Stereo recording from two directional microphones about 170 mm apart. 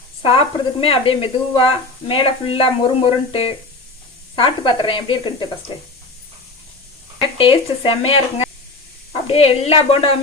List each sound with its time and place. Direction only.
0.2 s speech: 30° left (ahead or behind)
7.2 s speech: 30° left (ahead or behind)